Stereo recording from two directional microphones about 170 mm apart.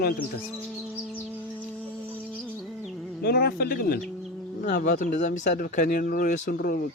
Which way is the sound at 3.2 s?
65° left (ahead or behind).